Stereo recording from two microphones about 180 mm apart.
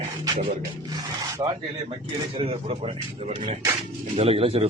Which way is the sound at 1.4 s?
25° right (ahead or behind).